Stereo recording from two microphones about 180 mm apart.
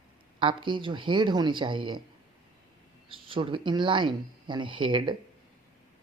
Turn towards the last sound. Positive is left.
turn(degrees=-25)  # may be behind; listen again after turning